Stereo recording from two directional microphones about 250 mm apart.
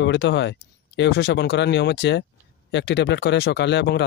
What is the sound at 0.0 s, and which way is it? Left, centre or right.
Speech, left.